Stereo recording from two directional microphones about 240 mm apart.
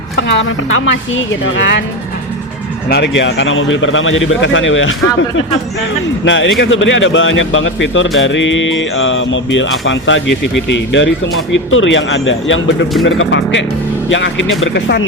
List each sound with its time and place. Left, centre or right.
0.2 s speech: left
2.9 s speech: left
6.2 s speech: left